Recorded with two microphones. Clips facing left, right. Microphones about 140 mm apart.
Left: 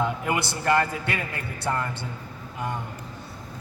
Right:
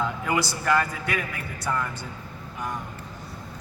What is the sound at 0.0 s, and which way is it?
A man's voice, 25° left (ahead or behind).